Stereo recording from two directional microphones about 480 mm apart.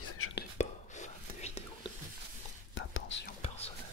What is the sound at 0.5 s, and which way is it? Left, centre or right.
Whispering, centre.